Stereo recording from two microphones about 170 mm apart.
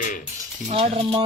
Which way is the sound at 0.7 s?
35° right (ahead or behind).